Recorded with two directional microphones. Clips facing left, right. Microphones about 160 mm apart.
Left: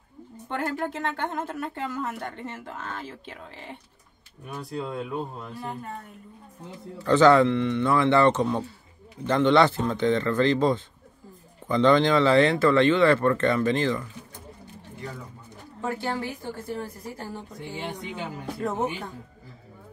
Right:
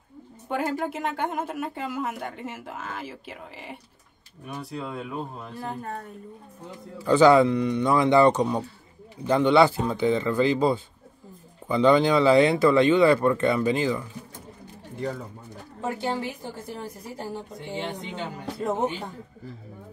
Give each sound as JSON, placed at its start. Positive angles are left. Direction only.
{"t": 0.5, "sound": "a woman's voice", "side_deg": -10}
{"t": 7.0, "sound": "a woman's voice", "side_deg": -10}
{"t": 15.8, "sound": "a woman's voice", "side_deg": -15}
{"t": 17.7, "sound": "speech", "side_deg": 10}